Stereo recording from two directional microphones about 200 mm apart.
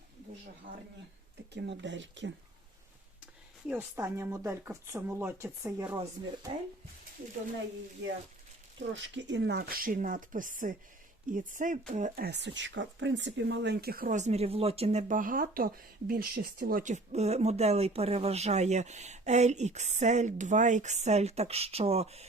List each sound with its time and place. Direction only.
1.5 s speech: 60° right (ahead or behind)
3.7 s speech: 10° right (ahead or behind)
9.0 s speech: 65° right (ahead or behind); by 22.3 s 30° right (ahead or behind)